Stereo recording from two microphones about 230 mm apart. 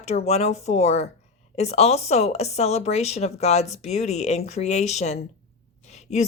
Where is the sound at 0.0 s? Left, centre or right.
Left.